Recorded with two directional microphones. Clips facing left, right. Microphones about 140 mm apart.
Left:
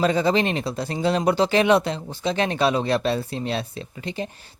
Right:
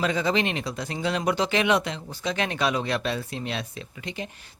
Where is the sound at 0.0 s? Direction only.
35° left (ahead or behind).